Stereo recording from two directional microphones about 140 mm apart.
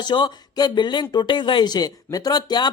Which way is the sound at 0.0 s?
35° left (ahead or behind).